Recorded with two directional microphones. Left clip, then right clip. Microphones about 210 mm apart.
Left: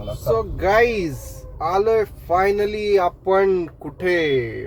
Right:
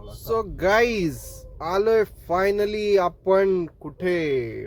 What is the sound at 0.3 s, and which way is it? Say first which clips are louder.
Speech: left 3 dB; 30° right (ahead or behind).